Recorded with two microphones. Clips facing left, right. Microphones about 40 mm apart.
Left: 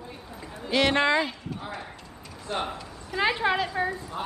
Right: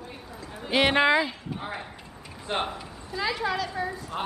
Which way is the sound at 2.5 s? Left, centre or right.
Right.